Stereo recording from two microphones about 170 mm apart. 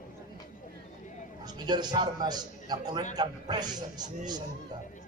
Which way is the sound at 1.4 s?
25° right (ahead or behind).